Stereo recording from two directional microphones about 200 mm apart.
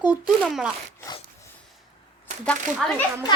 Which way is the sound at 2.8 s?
Centre (ahead or behind).